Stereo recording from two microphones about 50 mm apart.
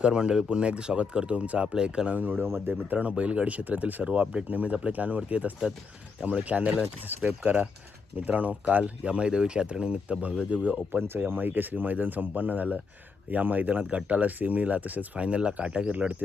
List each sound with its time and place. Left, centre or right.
0.0 s speech: centre
2.0 s speech: right
2.4 s speech: right
2.9 s speech: right
11.3 s speech: right